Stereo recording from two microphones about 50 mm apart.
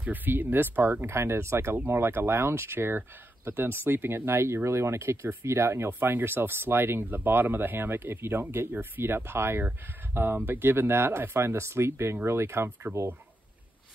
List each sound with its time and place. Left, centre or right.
0.0 s speech: right
1.0 s speech: right
4.6 s speech: right